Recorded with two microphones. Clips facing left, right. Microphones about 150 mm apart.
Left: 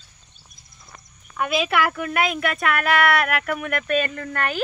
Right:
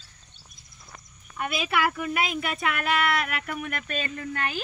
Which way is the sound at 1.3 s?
90° left.